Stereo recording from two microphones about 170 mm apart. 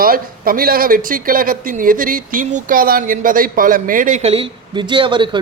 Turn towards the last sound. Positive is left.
turn(degrees=-30)  # may be behind; listen again after turning